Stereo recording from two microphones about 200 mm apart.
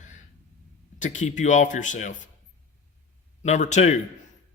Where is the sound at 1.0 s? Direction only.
35° left (ahead or behind).